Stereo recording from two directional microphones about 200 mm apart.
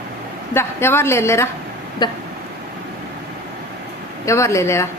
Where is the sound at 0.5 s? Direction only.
10° left (ahead or behind).